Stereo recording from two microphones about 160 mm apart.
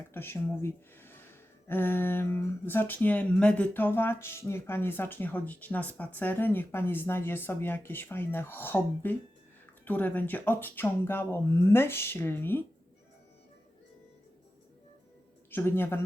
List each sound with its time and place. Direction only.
0.1 s speech: 15° left (ahead or behind)
15.4 s speech: 15° left (ahead or behind)